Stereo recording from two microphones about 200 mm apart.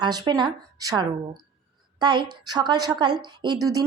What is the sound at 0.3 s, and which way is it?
A woman's voice, 20° right (ahead or behind).